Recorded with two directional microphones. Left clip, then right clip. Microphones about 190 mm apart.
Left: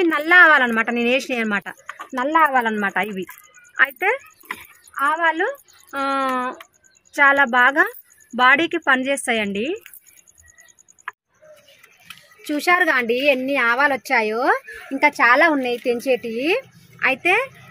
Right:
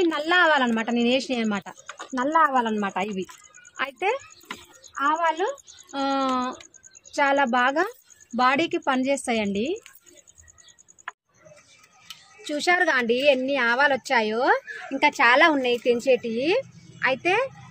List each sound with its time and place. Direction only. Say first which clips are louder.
0.0 s speech: left 7 dB; 5° left (ahead or behind)
1.9 s a sound: left 4 dB; 10° right (ahead or behind)
2.6 s a woman's voice: left 5 dB; 10° left (ahead or behind)
12.4 s a woman's voice: left 4 dB; 40° left (ahead or behind)